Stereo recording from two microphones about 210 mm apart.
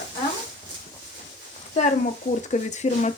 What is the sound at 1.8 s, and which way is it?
Speech, 35° left (ahead or behind).